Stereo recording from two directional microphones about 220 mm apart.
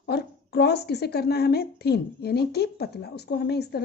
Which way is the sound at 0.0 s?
50° left (ahead or behind).